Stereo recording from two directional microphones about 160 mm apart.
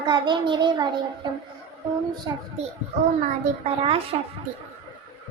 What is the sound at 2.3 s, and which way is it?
Child singing, 25° right (ahead or behind).